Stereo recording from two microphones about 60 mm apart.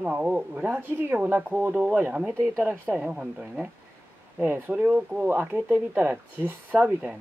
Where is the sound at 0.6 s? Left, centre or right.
Right.